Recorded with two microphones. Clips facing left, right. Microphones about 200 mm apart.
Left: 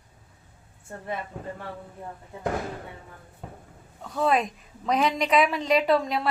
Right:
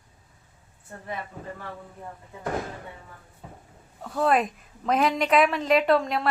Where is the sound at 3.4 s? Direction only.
65° left (ahead or behind).